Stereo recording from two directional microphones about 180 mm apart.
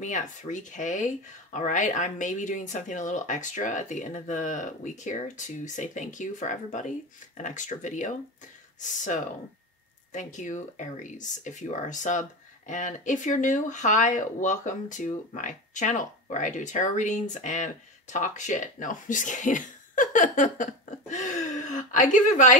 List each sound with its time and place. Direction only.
0.0 s speech: 45° left (ahead or behind)
10.1 s speech: 45° left (ahead or behind)